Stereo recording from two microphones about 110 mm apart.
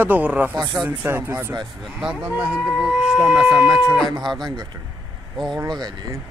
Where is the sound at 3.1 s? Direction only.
Centre (ahead or behind).